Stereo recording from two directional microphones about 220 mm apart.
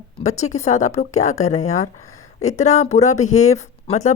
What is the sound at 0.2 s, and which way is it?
Speech, 30° left (ahead or behind).